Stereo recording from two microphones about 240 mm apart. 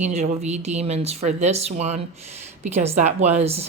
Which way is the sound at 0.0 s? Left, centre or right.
Right.